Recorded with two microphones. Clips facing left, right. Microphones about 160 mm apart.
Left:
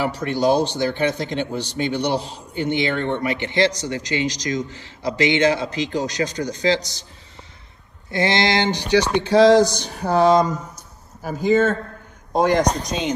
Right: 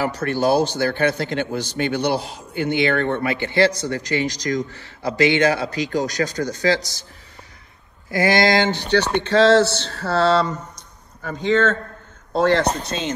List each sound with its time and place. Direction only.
0.2 s a man's voice: 20° left (ahead or behind)
8.1 s a man's voice: 25° left (ahead or behind)